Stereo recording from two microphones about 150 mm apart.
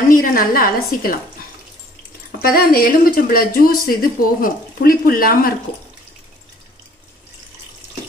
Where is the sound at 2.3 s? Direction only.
80° left.